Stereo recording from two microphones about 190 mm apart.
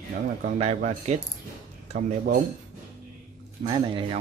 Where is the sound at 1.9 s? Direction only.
45° right (ahead or behind).